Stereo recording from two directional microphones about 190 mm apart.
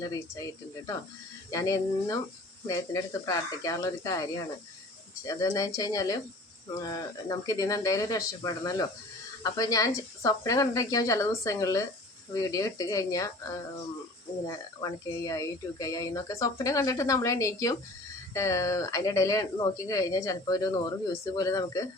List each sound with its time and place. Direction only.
0.0 s speech: 20° left (ahead or behind)
1.5 s speech: 20° left (ahead or behind)
14.4 s speech: 20° left (ahead or behind)